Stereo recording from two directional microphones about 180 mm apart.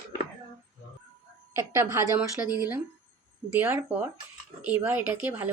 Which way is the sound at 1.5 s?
15° right (ahead or behind).